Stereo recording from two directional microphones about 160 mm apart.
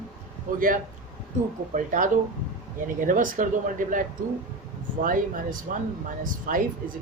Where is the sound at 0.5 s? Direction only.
55° right (ahead or behind).